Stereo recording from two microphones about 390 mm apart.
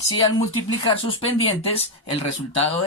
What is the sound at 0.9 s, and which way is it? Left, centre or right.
Speech, centre.